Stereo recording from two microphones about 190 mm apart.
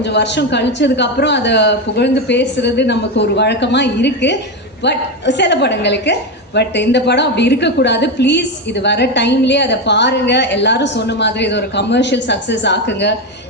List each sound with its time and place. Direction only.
0.0 s a woman's voice: 65° left (ahead or behind)